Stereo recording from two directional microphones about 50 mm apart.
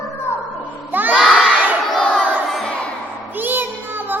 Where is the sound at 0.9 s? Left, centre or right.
Right.